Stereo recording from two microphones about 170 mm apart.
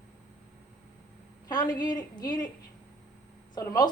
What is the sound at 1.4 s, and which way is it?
A woman's voice, 25° left (ahead or behind).